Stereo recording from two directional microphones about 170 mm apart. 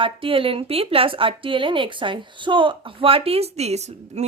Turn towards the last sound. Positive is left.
turn(degrees=-40)  # may be behind; listen again after turning